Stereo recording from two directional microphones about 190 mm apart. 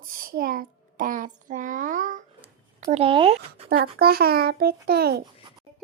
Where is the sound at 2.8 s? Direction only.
35° right (ahead or behind).